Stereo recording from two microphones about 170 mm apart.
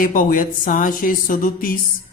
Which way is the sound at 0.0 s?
55° left (ahead or behind).